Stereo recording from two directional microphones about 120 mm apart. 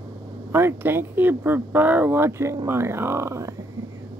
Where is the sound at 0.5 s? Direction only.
20° right (ahead or behind).